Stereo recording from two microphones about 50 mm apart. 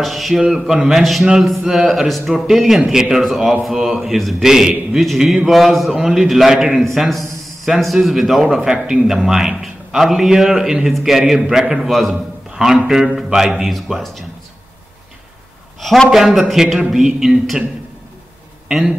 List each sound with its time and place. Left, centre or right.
0.0 s a sound: centre
0.4 s a man's voice: centre
6.8 s a man's voice: centre
11.9 s a man's voice: centre
16.1 s a man's voice: centre
18.7 s speech: centre